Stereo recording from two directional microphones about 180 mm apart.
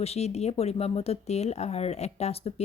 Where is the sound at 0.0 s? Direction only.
35° left (ahead or behind).